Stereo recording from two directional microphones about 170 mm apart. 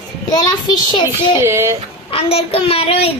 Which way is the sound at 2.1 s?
35° left (ahead or behind).